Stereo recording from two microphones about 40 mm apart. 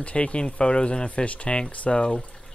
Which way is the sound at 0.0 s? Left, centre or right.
Left.